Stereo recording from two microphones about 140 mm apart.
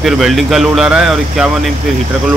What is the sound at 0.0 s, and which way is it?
Speech, centre (ahead or behind).